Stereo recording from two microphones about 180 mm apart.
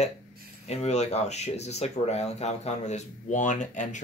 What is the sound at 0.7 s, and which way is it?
Speech, 35° left (ahead or behind).